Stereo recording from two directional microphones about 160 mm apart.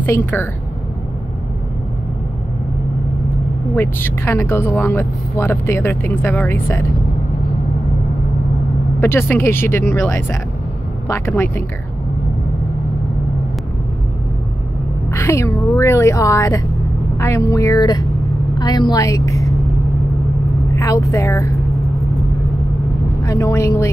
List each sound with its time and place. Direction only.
0.0 s speech: 15° left (ahead or behind)
3.7 s speech: 15° left (ahead or behind)
9.0 s speech: 15° left (ahead or behind)
15.0 s a woman's voice: 20° left (ahead or behind)
20.7 s a woman's voice: 20° left (ahead or behind)
23.2 s a woman's voice: 20° left (ahead or behind)